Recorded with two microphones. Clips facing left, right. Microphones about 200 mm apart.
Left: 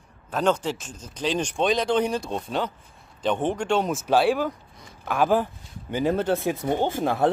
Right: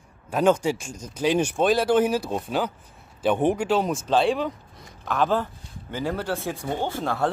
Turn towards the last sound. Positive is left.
turn(degrees=15)  # may be behind; listen again after turning